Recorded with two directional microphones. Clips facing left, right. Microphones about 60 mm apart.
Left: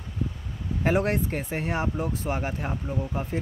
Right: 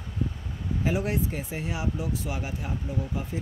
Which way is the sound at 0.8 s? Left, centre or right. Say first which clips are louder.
Left 4 dB; left.